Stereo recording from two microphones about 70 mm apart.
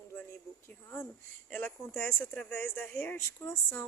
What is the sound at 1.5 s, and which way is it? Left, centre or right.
A woman's voice, left.